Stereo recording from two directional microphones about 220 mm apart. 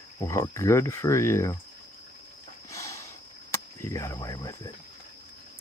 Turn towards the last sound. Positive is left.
turn(degrees=15)  # may be behind; listen again after turning